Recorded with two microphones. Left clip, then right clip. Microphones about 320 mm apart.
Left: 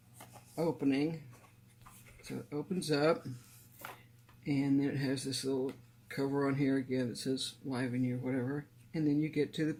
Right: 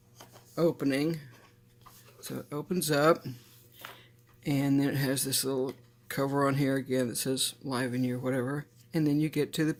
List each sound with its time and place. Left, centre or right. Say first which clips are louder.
0.5 s speech: right 5 dB; right
2.2 s speech: right 3 dB; right
4.4 s speech: right 4 dB; right